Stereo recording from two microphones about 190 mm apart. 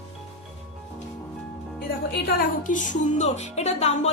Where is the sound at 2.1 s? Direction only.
55° left (ahead or behind).